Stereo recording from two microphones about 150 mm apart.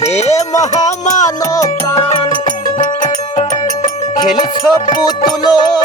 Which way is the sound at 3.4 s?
55° left (ahead or behind).